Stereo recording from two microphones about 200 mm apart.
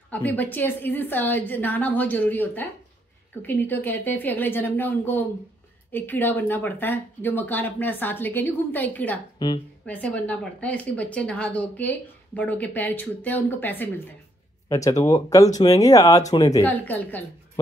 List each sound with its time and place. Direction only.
0.1 s speech: 10° left (ahead or behind)
9.4 s speech: 20° left (ahead or behind)
9.8 s speech: 5° left (ahead or behind)